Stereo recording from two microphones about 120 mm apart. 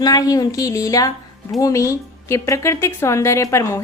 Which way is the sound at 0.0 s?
30° left (ahead or behind).